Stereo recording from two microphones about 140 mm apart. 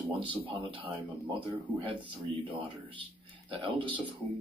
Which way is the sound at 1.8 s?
35° right (ahead or behind).